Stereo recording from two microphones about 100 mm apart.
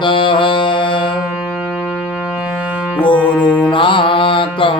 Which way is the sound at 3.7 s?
60° left (ahead or behind).